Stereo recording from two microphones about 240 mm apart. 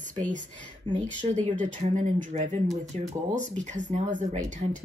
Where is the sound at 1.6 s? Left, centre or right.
Right.